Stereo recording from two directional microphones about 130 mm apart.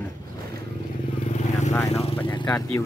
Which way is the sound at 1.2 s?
65° left (ahead or behind).